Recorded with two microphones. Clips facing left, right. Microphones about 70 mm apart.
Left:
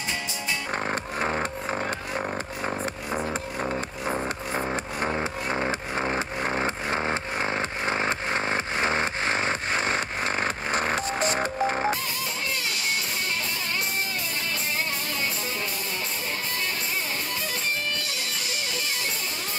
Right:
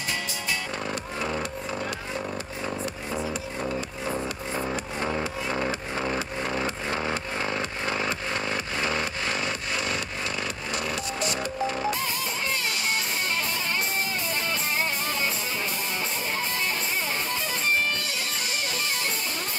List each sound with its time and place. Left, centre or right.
0.8 s music: left
4.0 s music: left